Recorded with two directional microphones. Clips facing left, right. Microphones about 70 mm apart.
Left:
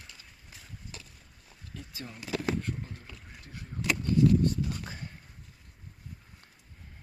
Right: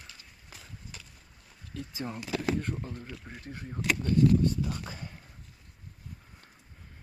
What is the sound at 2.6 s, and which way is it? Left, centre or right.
Speech, right.